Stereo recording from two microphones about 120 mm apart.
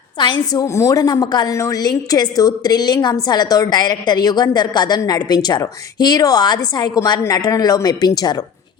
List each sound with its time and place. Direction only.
0.2 s a woman's voice: 40° left (ahead or behind)
0.6 s a woman's voice: 25° left (ahead or behind)